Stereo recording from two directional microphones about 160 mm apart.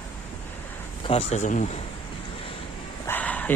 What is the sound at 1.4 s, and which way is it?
Speech, 50° left (ahead or behind).